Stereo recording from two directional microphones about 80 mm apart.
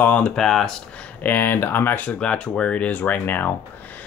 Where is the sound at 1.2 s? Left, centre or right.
Left.